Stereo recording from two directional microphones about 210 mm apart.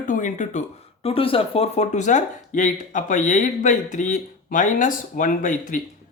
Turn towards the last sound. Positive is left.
turn(degrees=40)  # may be behind; listen again after turning